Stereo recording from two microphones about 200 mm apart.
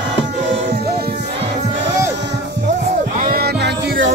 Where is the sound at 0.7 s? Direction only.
50° right (ahead or behind).